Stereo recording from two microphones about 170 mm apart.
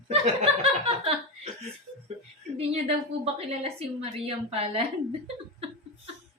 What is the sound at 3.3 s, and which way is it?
A woman's voice, 35° right (ahead or behind).